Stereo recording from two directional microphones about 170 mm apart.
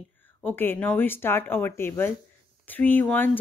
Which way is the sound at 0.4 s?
10° left (ahead or behind).